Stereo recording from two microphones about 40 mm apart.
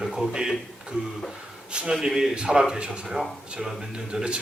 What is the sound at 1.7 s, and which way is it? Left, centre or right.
Speech, right.